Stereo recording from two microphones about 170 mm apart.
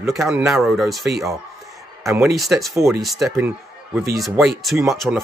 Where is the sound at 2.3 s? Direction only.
Centre (ahead or behind).